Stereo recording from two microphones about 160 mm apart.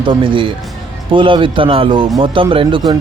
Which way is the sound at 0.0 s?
35° right (ahead or behind).